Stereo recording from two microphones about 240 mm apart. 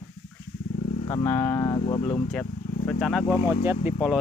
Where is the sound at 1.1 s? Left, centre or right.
Centre.